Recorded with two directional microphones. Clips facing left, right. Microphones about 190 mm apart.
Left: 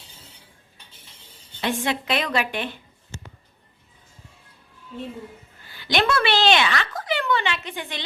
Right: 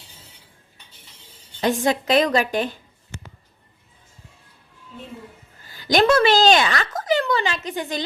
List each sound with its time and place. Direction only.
1.6 s a woman's voice: 40° right (ahead or behind)
5.6 s a woman's voice: 40° right (ahead or behind)